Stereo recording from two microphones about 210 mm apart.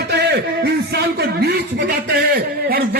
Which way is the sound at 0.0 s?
50° right (ahead or behind).